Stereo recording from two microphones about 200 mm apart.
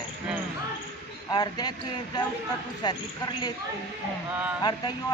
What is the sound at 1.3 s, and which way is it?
Speech, 20° left (ahead or behind).